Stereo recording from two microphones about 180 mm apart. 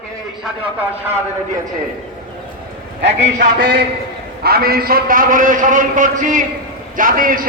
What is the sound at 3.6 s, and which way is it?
Speech, 70° right (ahead or behind).